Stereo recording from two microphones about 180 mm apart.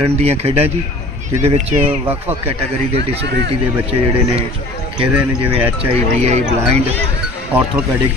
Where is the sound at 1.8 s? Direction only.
10° right (ahead or behind).